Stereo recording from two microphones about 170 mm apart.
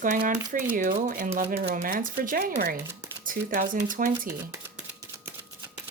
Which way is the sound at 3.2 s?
55° right (ahead or behind).